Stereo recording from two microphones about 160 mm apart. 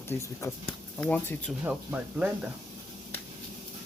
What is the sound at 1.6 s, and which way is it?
Speech, 10° right (ahead or behind).